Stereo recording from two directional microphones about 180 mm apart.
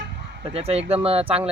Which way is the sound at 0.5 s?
35° right (ahead or behind).